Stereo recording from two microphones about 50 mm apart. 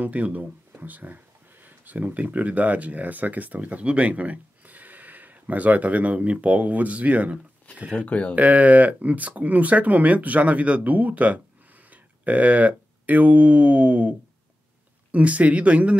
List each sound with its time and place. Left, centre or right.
0.0 s speech: right
7.9 s speech: left
8.4 s speech: right